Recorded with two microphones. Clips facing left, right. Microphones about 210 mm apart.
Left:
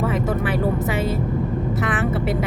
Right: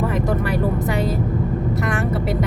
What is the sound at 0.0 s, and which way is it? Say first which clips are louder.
Vehicle: right 1 dB; centre (ahead or behind).